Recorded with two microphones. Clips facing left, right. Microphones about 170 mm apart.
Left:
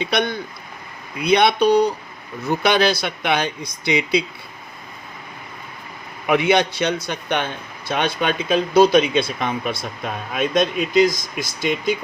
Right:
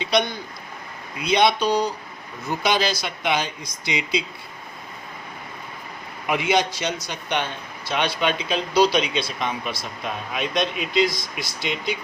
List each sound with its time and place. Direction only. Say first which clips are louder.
0.0 s speech: left 1 dB; 55° left (ahead or behind)
6.2 s speech: left 4 dB; 60° left (ahead or behind)